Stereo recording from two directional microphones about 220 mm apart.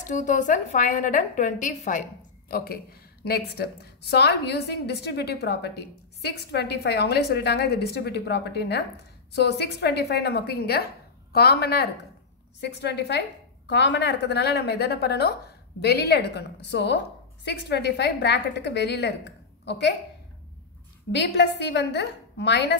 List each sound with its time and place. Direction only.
0.0 s a woman's voice: 35° left (ahead or behind); by 19.9 s 50° left (ahead or behind)
21.1 s a woman's voice: 50° left (ahead or behind)